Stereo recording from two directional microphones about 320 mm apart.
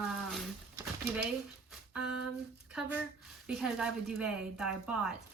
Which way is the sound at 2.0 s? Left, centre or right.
Right.